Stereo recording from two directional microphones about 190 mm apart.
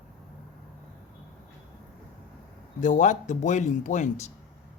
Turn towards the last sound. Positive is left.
turn(degrees=40)  # may be behind; listen again after turning